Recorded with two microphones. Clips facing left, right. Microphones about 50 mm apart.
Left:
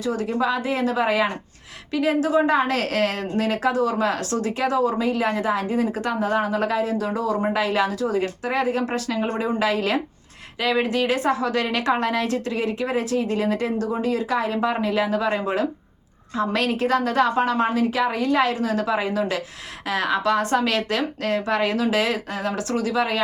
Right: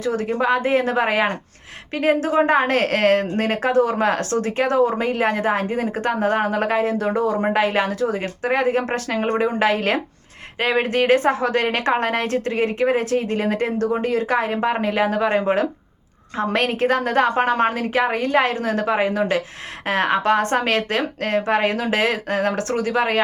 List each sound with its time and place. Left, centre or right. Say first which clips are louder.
0.0 s a woman's voice: right 2 dB; right